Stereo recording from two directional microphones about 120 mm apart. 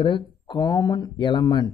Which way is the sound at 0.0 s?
40° left (ahead or behind).